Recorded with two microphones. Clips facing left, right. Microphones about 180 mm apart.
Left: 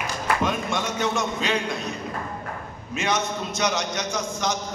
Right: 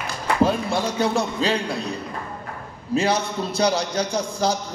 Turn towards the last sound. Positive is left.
turn(degrees=-35)  # may be behind; listen again after turning